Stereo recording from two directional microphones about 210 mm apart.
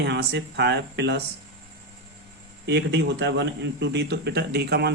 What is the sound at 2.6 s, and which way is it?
A man's voice, 55° right (ahead or behind).